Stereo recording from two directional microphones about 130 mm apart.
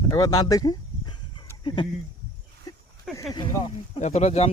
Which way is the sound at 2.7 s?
30° left (ahead or behind).